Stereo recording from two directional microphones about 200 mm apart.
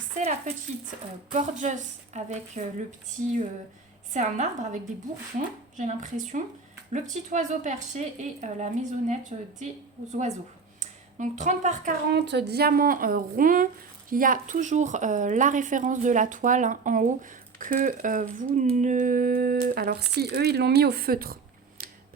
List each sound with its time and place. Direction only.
0.2 s a woman's voice: 35° right (ahead or behind)
4.1 s a woman's voice: 35° right (ahead or behind)
12.1 s a woman's voice: 55° right (ahead or behind)
21.8 s scissors: 45° right (ahead or behind)